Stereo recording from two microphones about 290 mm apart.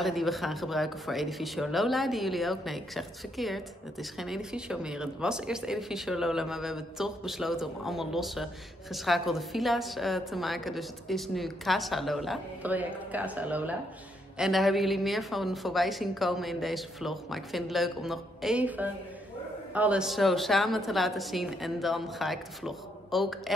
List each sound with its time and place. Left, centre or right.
0.0 s speech: centre